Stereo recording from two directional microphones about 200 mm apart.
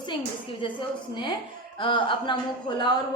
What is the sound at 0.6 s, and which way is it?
A woman's voice, 25° left (ahead or behind).